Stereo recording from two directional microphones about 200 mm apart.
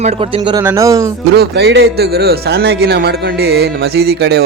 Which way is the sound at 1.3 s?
55° right (ahead or behind).